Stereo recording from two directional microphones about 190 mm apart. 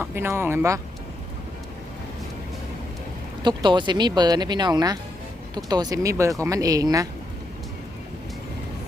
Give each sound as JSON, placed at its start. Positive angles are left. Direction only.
{"t": 0.0, "sound": "speech", "side_deg": -10}
{"t": 3.4, "sound": "speech", "side_deg": -25}